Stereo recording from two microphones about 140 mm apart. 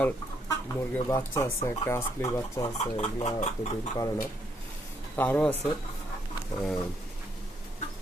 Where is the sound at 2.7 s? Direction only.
50° left (ahead or behind).